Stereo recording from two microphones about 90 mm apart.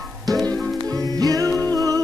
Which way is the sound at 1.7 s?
40° right (ahead or behind).